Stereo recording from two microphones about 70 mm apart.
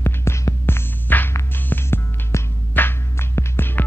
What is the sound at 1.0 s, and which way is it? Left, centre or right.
Hum, left.